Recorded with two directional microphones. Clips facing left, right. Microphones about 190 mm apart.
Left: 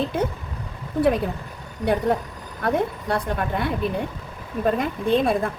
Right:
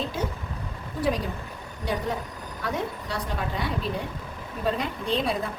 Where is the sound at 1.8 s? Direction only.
60° left (ahead or behind).